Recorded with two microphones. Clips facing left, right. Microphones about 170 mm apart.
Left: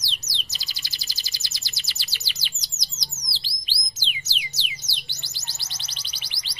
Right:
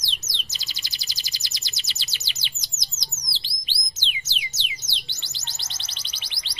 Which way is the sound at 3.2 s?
20° right (ahead or behind).